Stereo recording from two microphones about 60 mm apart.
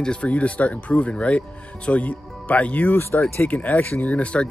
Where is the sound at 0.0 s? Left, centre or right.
Centre.